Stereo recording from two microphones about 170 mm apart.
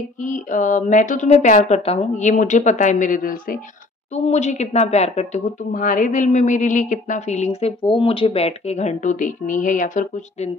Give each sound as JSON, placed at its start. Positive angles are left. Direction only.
{"t": 0.2, "sound": "a woman's voice", "side_deg": 50}
{"t": 4.1, "sound": "a woman's voice", "side_deg": 40}